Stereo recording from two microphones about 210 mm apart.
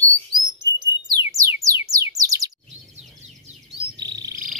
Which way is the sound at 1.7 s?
15° right (ahead or behind).